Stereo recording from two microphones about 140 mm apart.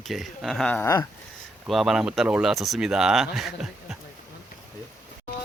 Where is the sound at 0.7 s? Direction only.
15° left (ahead or behind).